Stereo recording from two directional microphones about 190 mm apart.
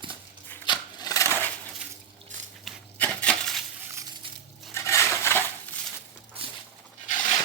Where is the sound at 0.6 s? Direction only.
25° left (ahead or behind).